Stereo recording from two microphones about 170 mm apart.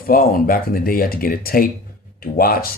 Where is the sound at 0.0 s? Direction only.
60° left (ahead or behind).